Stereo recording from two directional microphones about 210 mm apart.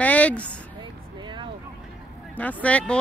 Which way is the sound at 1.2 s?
20° right (ahead or behind).